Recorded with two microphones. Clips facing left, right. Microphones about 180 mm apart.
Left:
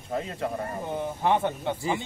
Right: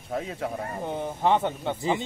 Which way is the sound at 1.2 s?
20° right (ahead or behind).